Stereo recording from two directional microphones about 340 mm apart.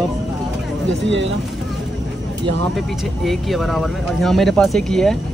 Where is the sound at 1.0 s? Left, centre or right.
Right.